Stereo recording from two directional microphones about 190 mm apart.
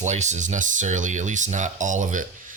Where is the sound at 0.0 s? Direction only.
40° right (ahead or behind).